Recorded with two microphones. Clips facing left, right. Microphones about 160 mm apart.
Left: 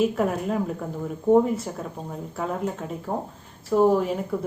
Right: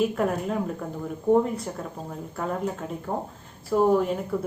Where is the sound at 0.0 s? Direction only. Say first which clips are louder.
Left 1 dB; centre (ahead or behind).